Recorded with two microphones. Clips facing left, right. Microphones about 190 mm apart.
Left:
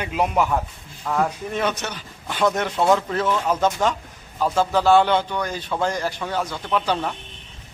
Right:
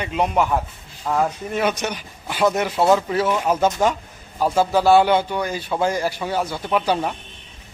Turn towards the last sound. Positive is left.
turn(degrees=-10)  # may be behind; listen again after turning